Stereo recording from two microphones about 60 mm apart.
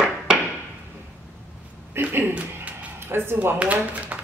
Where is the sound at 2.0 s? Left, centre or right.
Right.